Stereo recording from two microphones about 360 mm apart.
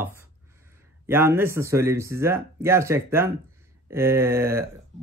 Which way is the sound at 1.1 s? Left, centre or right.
Centre.